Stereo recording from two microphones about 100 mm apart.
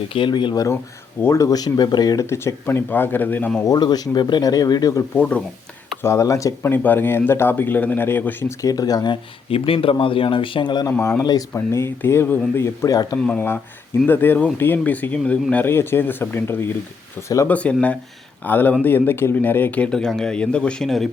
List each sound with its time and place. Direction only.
0.1 s speech: 55° left (ahead or behind)
1.2 s speech: 30° left (ahead or behind)
2.2 s speech: 25° left (ahead or behind)
3.7 s speech: 45° left (ahead or behind)
5.1 s speech: 15° left (ahead or behind)
6.0 s speech: 30° left (ahead or behind)
6.7 s speech: 20° left (ahead or behind)
8.6 s speech: 40° left (ahead or behind)
9.5 s speech: 65° left (ahead or behind)
11.2 s speech: 40° left (ahead or behind)
11.5 s speech: 25° left (ahead or behind)
14.1 s speech: 20° left (ahead or behind)
17.5 s speech: 10° left (ahead or behind)